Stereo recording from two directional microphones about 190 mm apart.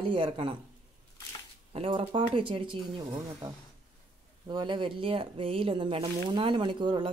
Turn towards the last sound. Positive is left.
turn(degrees=-25)  # may be behind; listen again after turning